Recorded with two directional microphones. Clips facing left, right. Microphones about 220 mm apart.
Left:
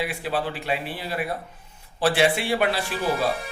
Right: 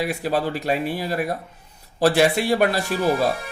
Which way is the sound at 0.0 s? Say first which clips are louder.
Right 4 dB; 40° right (ahead or behind).